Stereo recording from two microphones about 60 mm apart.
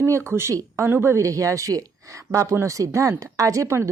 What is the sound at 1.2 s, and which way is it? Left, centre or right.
A woman's voice, right.